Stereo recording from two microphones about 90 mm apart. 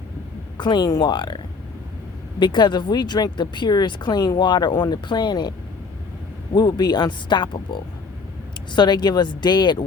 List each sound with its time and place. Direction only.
0.5 s speech: 55° left (ahead or behind)
2.4 s speech: 55° left (ahead or behind)